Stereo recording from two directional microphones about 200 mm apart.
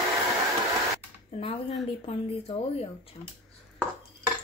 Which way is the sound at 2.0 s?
30° left (ahead or behind).